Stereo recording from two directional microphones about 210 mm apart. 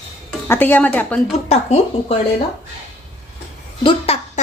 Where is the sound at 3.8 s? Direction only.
30° left (ahead or behind).